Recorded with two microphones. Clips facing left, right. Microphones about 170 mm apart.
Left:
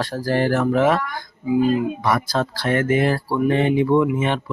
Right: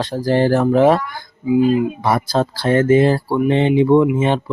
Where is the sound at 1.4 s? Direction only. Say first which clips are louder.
Right 4 dB; 20° right (ahead or behind).